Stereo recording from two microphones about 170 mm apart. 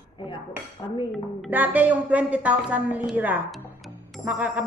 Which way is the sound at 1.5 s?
10° right (ahead or behind).